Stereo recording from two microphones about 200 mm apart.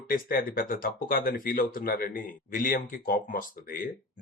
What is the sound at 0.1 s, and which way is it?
Speech, 45° left (ahead or behind).